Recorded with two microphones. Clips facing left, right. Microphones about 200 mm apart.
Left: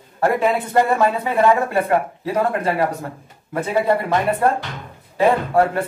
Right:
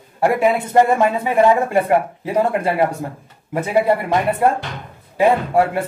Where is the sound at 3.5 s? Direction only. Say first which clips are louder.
Right 3 dB; 15° right (ahead or behind).